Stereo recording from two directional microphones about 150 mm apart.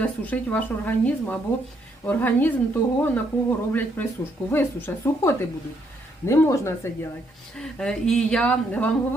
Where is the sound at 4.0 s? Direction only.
15° left (ahead or behind).